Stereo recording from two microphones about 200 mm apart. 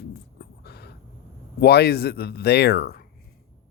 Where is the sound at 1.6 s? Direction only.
55° left (ahead or behind).